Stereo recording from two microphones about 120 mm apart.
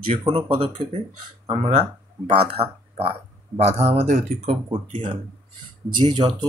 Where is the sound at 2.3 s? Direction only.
55° right (ahead or behind).